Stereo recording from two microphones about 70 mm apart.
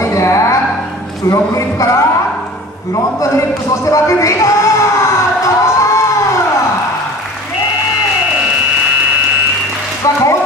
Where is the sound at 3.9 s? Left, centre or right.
Left.